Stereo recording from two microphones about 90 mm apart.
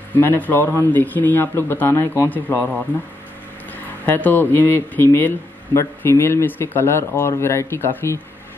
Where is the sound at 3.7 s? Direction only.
20° left (ahead or behind).